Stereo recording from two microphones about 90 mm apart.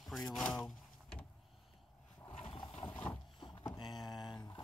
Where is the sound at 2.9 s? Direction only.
20° left (ahead or behind).